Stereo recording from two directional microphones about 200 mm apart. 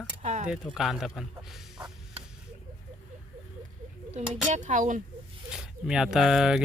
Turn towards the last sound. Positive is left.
turn(degrees=-5)  # may be behind; listen again after turning